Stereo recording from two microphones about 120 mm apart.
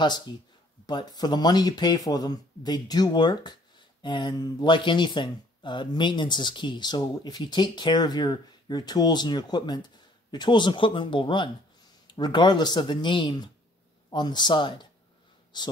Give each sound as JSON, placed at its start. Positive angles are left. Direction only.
{"t": 0.0, "sound": "speech", "side_deg": 35}